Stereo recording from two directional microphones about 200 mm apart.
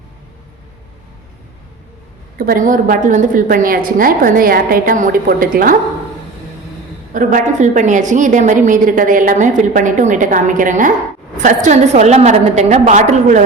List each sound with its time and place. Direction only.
2.4 s a woman's voice: 45° right (ahead or behind)
7.1 s a woman's voice: 40° right (ahead or behind)